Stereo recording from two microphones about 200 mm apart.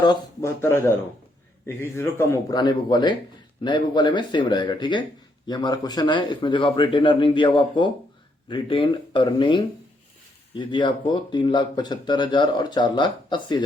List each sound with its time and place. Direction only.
0.0 s speech: 15° left (ahead or behind)